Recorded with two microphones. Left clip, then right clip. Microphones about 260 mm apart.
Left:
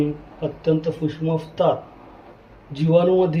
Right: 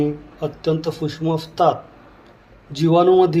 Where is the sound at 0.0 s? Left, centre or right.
Right.